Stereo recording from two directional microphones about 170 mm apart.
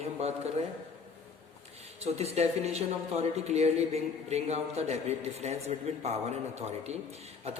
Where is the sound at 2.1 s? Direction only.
40° right (ahead or behind).